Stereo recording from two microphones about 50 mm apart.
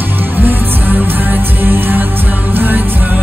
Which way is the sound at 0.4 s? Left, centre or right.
Right.